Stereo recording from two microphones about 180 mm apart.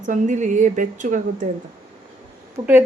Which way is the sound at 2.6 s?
25° right (ahead or behind).